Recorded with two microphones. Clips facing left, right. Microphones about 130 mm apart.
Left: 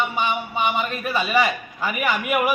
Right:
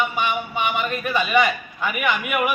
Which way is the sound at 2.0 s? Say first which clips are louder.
Left 1 dB; 35° left (ahead or behind).